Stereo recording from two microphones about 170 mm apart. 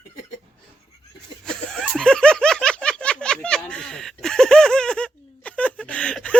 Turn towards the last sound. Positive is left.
turn(degrees=5)  # may be behind; listen again after turning